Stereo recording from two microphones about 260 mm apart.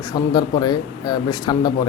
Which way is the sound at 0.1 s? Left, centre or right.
Centre.